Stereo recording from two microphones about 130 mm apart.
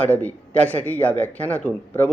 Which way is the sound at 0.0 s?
10° left (ahead or behind).